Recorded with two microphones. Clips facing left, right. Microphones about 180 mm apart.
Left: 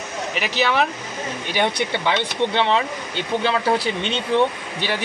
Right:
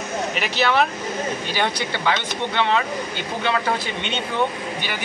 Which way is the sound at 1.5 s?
20° left (ahead or behind).